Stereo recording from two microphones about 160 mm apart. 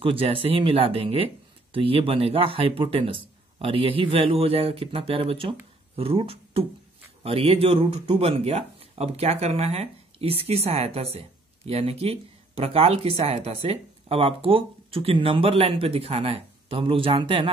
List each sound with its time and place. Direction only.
0.0 s speech: 35° right (ahead or behind)